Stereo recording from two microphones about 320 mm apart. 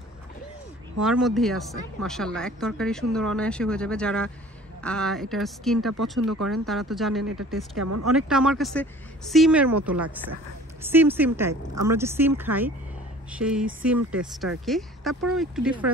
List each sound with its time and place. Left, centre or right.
1.0 s a woman's voice: centre
7.8 s speech: right
8.2 s a woman's voice: centre